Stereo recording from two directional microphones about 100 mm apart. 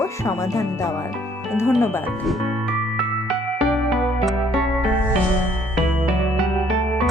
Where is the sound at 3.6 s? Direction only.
Centre (ahead or behind).